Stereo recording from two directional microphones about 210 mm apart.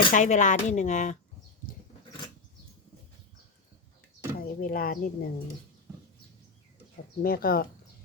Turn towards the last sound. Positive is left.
turn(degrees=45)  # may be behind; listen again after turning